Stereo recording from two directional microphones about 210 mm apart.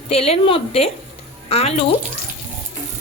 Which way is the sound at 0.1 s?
30° left (ahead or behind).